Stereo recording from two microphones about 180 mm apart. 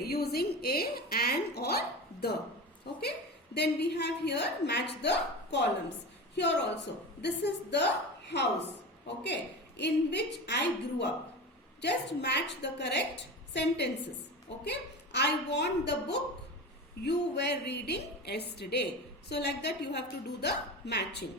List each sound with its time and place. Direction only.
0.0 s a woman's voice: 60° left (ahead or behind)
2.8 s a woman's voice: 65° left (ahead or behind)